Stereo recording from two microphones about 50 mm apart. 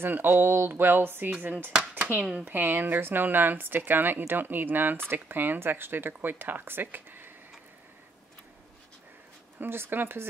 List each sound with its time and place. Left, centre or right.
0.0 s speech: right
1.7 s speech: right
2.4 s speech: right
9.6 s speech: right